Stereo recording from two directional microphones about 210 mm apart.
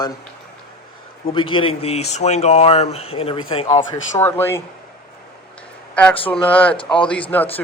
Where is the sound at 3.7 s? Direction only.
15° left (ahead or behind).